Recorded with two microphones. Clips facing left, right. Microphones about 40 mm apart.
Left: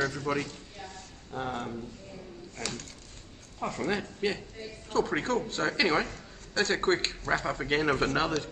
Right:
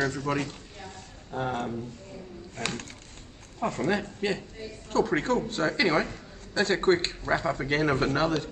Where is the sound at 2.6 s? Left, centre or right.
Right.